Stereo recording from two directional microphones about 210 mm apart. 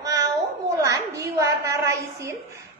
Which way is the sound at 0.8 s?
15° right (ahead or behind).